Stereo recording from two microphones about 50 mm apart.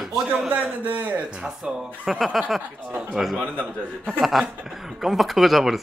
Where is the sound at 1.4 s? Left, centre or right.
Centre.